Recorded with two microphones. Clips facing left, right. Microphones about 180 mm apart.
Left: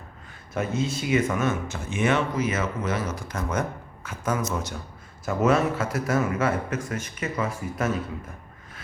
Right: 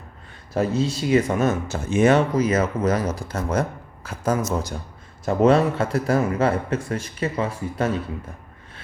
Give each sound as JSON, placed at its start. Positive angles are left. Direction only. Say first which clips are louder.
{"t": 0.5, "sound": "speech", "louder": "right 5 dB", "side_deg": -35}